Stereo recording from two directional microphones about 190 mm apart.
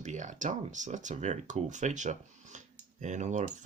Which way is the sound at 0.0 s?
40° right (ahead or behind).